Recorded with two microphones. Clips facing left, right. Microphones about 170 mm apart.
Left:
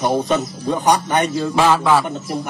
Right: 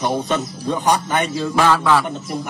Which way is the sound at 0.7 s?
20° left (ahead or behind).